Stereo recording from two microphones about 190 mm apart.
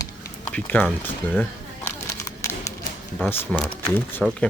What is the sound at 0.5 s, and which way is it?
Speech, 10° left (ahead or behind).